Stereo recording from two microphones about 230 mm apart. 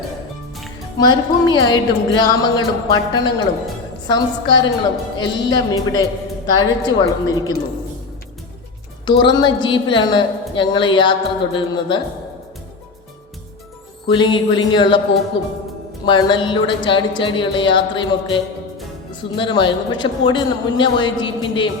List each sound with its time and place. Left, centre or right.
0.9 s a woman's voice: centre
9.0 s speech: centre
14.1 s speech: centre
16.0 s speech: centre